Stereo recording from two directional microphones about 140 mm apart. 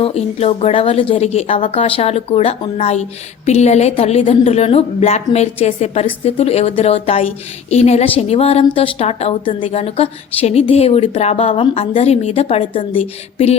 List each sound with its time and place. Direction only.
0.0 s a woman's voice: 45° left (ahead or behind)